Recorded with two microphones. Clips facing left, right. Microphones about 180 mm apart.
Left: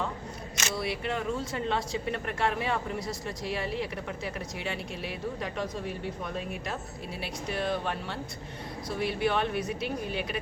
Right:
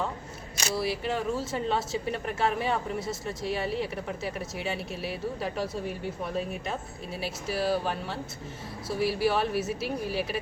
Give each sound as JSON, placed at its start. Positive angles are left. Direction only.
{"t": 0.7, "sound": "speech", "side_deg": 0}